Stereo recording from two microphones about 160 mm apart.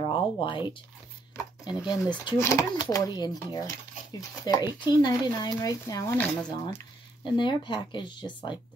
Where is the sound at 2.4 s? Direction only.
20° left (ahead or behind).